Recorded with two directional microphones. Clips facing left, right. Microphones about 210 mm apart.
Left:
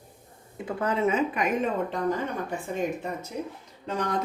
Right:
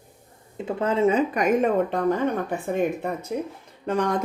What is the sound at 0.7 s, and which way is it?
Speech, 25° right (ahead or behind).